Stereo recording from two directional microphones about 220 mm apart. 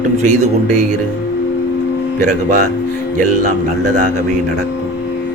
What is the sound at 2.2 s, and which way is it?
A man's voice, 35° right (ahead or behind).